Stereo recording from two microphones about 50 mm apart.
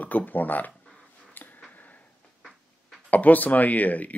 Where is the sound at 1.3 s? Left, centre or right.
Left.